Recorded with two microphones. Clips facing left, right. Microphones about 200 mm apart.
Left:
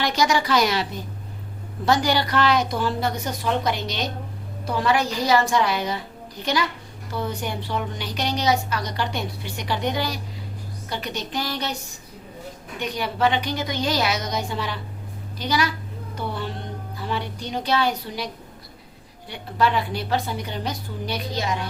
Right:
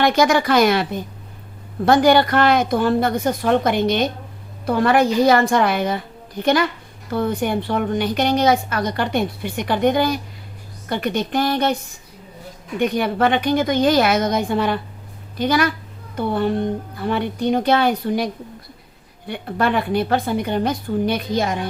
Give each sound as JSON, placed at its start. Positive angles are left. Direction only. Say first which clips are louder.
{"t": 0.0, "sound": "a woman's voice", "louder": "right 6 dB", "side_deg": -55}
{"t": 12.8, "sound": "a woman's voice", "louder": "right 5 dB", "side_deg": -55}
{"t": 19.3, "sound": "a woman's voice", "louder": "right 3 dB", "side_deg": -55}